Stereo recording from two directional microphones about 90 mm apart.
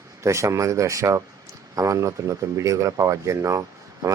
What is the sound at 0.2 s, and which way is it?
Speech, 35° right (ahead or behind).